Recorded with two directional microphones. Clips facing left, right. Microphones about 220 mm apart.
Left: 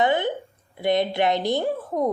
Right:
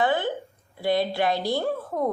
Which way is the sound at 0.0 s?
20° left (ahead or behind).